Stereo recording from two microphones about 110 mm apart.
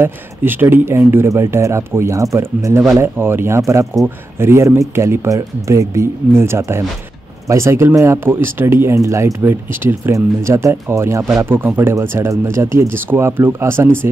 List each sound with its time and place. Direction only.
0.0 s speech: 20° right (ahead or behind)